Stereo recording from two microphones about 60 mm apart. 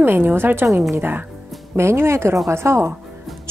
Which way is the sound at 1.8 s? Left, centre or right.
Right.